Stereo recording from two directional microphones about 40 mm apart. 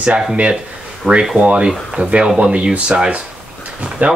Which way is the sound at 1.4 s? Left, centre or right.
Right.